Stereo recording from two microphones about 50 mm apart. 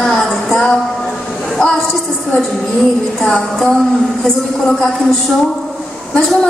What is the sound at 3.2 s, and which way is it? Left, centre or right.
Music, left.